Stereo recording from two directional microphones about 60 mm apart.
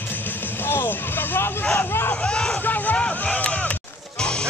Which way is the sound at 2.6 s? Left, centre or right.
Left.